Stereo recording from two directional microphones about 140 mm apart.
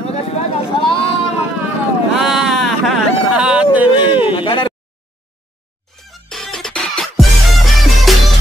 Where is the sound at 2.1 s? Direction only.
Centre (ahead or behind).